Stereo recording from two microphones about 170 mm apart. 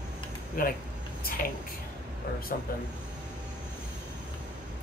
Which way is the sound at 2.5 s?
60° left (ahead or behind).